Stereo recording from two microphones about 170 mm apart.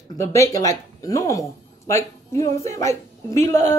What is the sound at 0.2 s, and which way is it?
A woman's voice, 20° left (ahead or behind).